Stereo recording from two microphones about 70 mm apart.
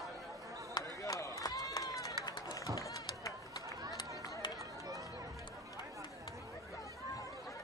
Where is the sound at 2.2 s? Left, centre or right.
Left.